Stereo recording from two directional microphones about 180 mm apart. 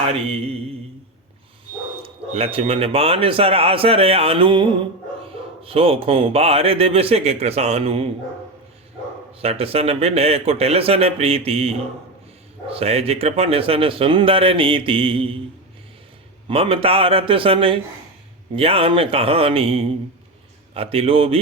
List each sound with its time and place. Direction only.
2.0 s speech: 30° right (ahead or behind)
9.4 s speech: 35° right (ahead or behind)
16.5 s speech: 30° right (ahead or behind)